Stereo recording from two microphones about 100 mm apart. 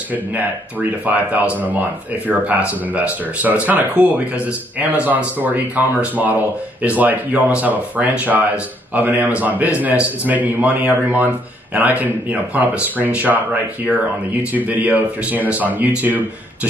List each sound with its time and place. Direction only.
0.1 s speech: 15° right (ahead or behind)